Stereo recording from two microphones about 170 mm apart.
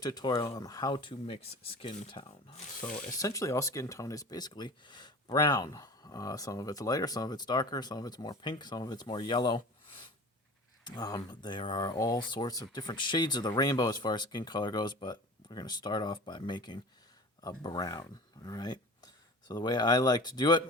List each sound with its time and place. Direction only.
0.0 s speech: 25° left (ahead or behind)
3.2 s speech: 20° left (ahead or behind)